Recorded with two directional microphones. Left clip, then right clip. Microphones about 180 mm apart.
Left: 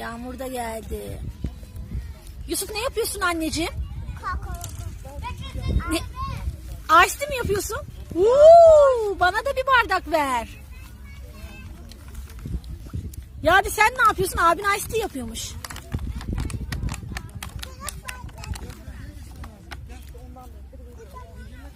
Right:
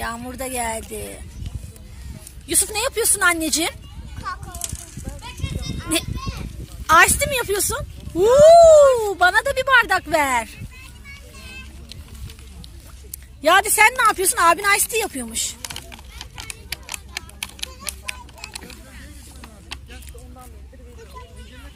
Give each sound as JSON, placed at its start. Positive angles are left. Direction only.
{"t": 0.0, "sound": "speech", "side_deg": 5}
{"t": 2.5, "sound": "speech", "side_deg": 0}
{"t": 4.6, "sound": "a sound", "side_deg": 60}
{"t": 5.8, "sound": "a child's voice", "side_deg": 0}
{"t": 13.4, "sound": "speech", "side_deg": 5}
{"t": 15.7, "sound": "horse", "side_deg": 25}